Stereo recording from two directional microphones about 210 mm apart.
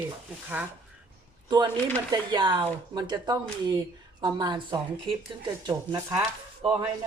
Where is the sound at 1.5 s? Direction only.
20° right (ahead or behind).